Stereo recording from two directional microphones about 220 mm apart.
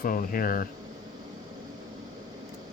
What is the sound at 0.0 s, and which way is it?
Speech, 40° left (ahead or behind).